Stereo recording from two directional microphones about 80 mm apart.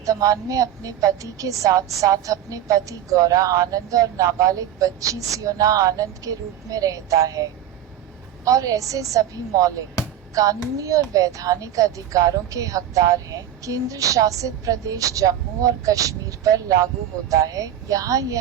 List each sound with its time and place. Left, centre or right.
0.0 s speech: right